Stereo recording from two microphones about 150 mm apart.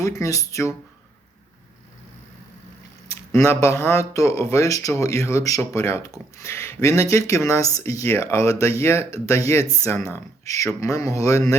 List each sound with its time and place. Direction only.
0.0 s speech: 20° left (ahead or behind)
3.1 s speech: 20° left (ahead or behind)